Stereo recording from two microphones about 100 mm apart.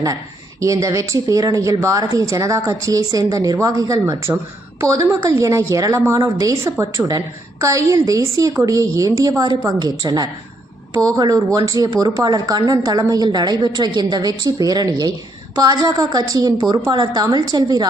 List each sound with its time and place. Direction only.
0.6 s a woman's voice: 35° right (ahead or behind)